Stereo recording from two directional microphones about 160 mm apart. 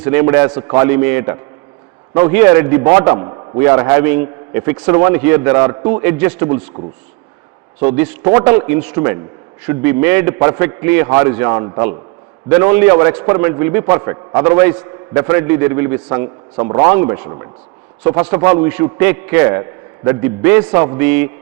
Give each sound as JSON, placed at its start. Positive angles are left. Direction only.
{"t": 0.0, "sound": "a man's voice", "side_deg": -15}
{"t": 6.8, "sound": "speech", "side_deg": -30}
{"t": 7.8, "sound": "a man's voice", "side_deg": -10}
{"t": 17.2, "sound": "a man's voice", "side_deg": -25}
{"t": 18.0, "sound": "a man's voice", "side_deg": -15}